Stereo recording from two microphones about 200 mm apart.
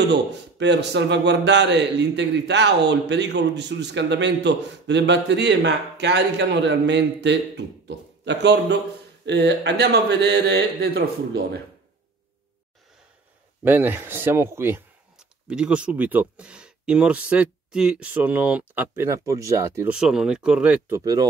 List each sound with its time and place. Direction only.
0.1 s a man's voice: 60° right (ahead or behind)
13.7 s speech: 10° right (ahead or behind)